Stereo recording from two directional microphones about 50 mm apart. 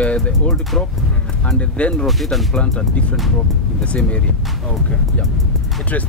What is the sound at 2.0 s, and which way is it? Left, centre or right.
Speech, centre.